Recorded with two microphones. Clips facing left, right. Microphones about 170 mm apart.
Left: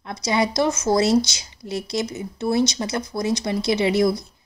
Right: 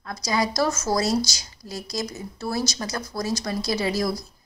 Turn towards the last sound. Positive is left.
turn(degrees=25)  # may be behind; listen again after turning